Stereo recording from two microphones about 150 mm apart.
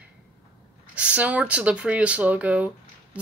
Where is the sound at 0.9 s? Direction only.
10° right (ahead or behind).